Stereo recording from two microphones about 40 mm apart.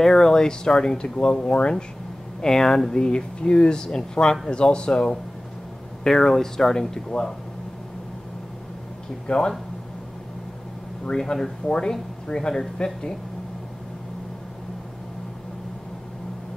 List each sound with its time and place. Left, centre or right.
0.0 s speech: centre
2.4 s speech: centre
9.3 s speech: left
11.1 s speech: centre